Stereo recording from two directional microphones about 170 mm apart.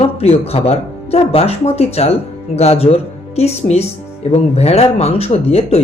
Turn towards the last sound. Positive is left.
turn(degrees=40)  # may be behind; listen again after turning